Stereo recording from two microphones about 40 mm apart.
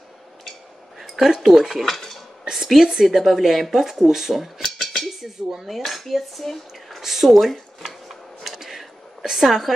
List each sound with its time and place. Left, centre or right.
0.5 s dishes: centre
2.8 s speech: centre
4.6 s a sound: centre
5.2 s speech: centre
5.8 s speech: centre
7.0 s a sound: centre